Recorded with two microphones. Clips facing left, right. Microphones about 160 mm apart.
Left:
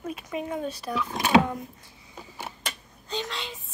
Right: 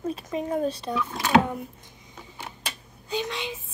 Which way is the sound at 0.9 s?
20° left (ahead or behind).